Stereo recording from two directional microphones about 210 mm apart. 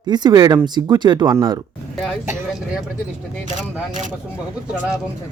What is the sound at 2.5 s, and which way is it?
Speech, 5° right (ahead or behind).